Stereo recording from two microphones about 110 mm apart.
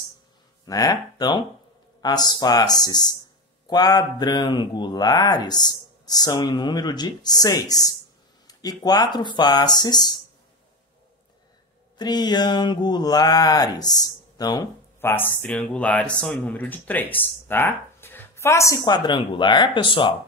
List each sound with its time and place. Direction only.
0.7 s speech: 35° left (ahead or behind)
12.0 s speech: 40° left (ahead or behind)
15.0 s speech: 20° left (ahead or behind)
18.9 s speech: 45° left (ahead or behind)